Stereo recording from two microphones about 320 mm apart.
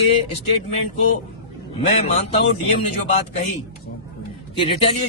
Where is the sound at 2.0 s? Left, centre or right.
Centre.